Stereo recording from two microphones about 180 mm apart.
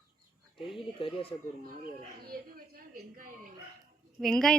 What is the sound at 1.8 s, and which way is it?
A woman's voice, 55° right (ahead or behind).